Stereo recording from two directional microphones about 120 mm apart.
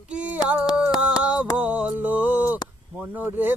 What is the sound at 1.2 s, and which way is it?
Mantra, 10° right (ahead or behind).